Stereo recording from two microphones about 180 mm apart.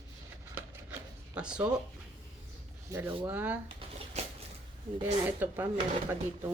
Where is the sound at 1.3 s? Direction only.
5° right (ahead or behind).